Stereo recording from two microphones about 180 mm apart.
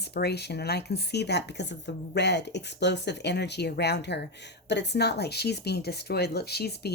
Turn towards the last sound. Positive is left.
turn(degrees=65)  # may be behind; listen again after turning